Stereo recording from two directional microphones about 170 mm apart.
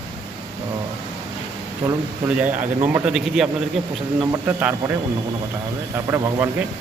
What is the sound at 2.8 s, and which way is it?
A man's voice, 10° right (ahead or behind).